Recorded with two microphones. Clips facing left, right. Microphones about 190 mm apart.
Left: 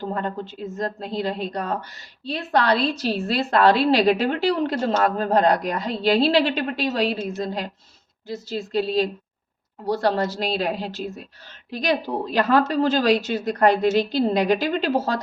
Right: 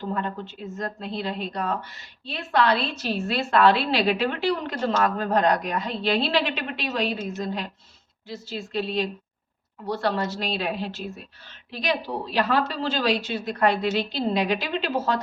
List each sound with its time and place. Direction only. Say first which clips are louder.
0.1 s a woman's voice: left 2 dB; 40° left (ahead or behind)